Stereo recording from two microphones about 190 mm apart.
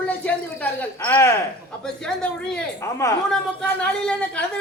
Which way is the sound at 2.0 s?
5° left (ahead or behind).